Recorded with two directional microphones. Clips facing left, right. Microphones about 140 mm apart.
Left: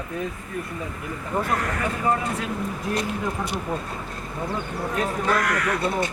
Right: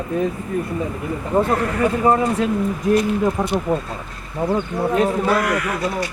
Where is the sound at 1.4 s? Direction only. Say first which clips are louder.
Right 8 dB; 30° right (ahead or behind).